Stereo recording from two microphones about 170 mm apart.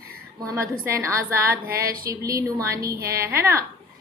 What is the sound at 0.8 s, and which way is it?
A woman's voice, 15° right (ahead or behind).